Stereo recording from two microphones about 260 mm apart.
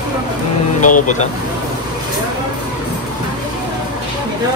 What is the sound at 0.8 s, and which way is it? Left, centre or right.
Speech, left.